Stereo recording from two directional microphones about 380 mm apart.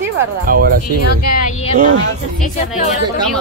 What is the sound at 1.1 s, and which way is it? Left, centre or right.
Speech, left.